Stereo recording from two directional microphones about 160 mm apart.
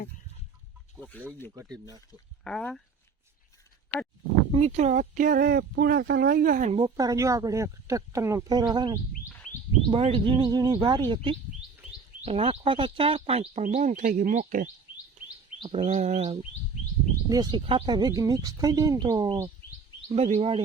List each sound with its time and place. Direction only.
0.9 s chicken: 10° left (ahead or behind)
1.5 s speech: 25° right (ahead or behind)
2.4 s speech: 5° left (ahead or behind)
4.5 s speech: 45° right (ahead or behind)
6.7 s speech: 25° right (ahead or behind); by 14.7 s 55° right (ahead or behind)
15.6 s speech: 40° right (ahead or behind)
17.2 s speech: 25° right (ahead or behind)
20.1 s speech: 45° right (ahead or behind)